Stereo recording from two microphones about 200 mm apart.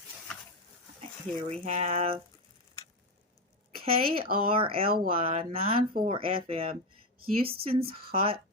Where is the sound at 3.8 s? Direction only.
30° right (ahead or behind).